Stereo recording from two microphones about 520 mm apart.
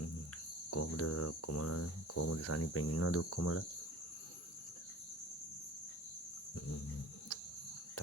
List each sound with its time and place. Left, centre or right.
0.7 s speech: left